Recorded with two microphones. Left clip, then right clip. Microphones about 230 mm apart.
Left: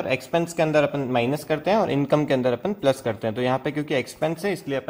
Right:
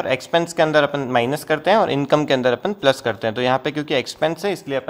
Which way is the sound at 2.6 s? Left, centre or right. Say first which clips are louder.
Right 4 dB; right.